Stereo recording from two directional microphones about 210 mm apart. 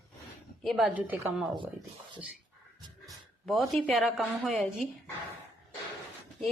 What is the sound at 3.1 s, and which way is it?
A woman's voice, centre (ahead or behind).